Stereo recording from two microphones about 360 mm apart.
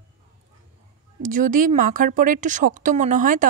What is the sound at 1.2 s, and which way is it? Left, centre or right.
A woman's voice, right.